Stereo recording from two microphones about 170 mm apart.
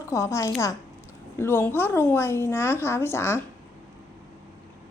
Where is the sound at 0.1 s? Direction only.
20° left (ahead or behind).